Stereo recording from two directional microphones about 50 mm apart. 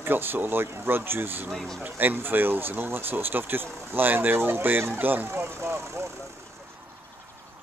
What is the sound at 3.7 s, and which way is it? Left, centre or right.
Speech, right.